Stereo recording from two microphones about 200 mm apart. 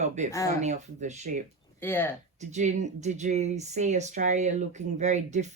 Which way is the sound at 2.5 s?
35° right (ahead or behind).